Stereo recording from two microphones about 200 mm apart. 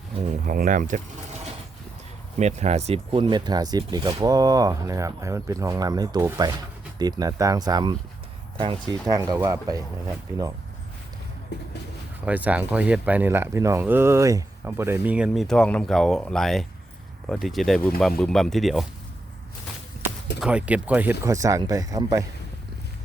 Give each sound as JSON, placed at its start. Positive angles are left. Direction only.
{"t": 0.4, "sound": "speech", "side_deg": -40}
{"t": 2.4, "sound": "speech", "side_deg": -35}
{"t": 12.2, "sound": "speech", "side_deg": -5}
{"t": 20.4, "sound": "speech", "side_deg": -5}